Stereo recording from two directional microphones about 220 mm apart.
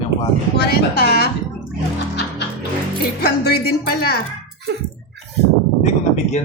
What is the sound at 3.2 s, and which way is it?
Speech, 45° left (ahead or behind).